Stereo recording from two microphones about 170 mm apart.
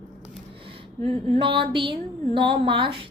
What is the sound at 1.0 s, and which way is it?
A woman's voice, 35° right (ahead or behind).